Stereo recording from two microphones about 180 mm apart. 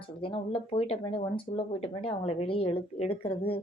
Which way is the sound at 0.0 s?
30° left (ahead or behind).